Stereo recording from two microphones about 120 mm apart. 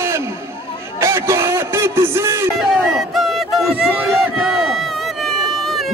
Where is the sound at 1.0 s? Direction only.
25° right (ahead or behind).